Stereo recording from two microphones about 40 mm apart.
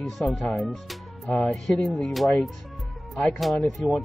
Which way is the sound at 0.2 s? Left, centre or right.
Centre.